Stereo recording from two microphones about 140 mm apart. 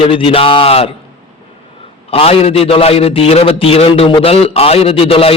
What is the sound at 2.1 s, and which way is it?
A man's voice, 45° left (ahead or behind).